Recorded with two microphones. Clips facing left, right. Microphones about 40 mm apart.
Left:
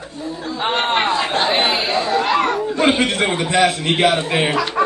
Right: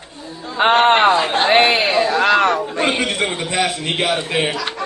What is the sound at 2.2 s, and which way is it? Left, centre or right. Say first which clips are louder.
Chatter: right 3 dB; right.